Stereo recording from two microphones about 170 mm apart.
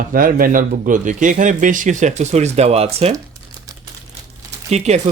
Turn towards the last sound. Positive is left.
turn(degrees=-40)  # may be behind; listen again after turning